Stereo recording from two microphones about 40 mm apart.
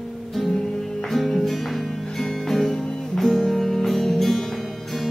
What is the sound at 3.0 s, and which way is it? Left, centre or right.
Music, centre.